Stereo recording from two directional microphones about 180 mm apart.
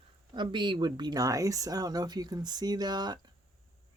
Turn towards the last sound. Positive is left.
turn(degrees=-25)  # may be behind; listen again after turning